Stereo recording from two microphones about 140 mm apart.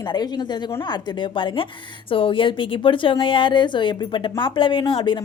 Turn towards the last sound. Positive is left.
turn(degrees=35)  # may be behind; listen again after turning